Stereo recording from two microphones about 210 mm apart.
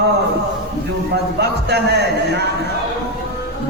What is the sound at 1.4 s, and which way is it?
A man's voice, 50° right (ahead or behind).